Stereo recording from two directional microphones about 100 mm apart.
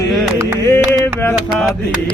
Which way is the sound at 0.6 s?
25° left (ahead or behind).